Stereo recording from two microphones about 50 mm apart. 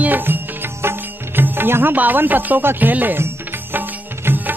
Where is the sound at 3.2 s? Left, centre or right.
Right.